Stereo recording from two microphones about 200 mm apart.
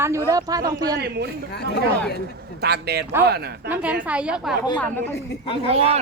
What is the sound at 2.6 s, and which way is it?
Speech, 55° right (ahead or behind).